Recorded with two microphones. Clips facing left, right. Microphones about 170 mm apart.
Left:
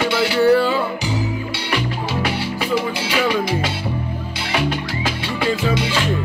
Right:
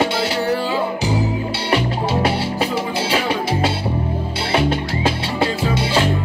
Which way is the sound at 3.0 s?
30° right (ahead or behind).